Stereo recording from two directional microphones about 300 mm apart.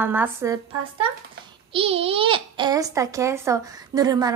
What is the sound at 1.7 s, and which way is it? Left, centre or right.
A child's voice, centre.